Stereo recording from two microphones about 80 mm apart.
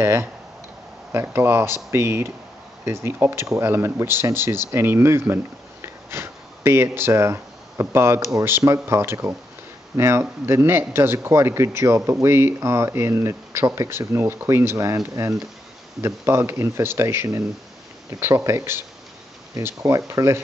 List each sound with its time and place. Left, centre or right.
0.0 s a man's voice: right